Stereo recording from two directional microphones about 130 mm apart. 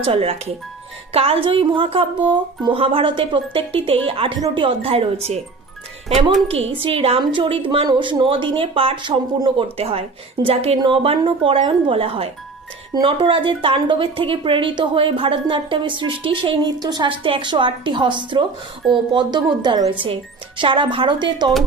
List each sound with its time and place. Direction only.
0.0 s a woman's voice: 45° right (ahead or behind)